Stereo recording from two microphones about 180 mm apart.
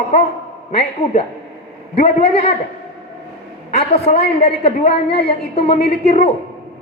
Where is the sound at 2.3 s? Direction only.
35° left (ahead or behind).